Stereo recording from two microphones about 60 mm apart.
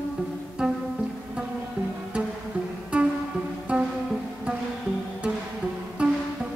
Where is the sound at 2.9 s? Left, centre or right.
Centre.